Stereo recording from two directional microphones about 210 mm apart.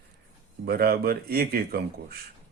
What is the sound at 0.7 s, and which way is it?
Speech, 45° right (ahead or behind).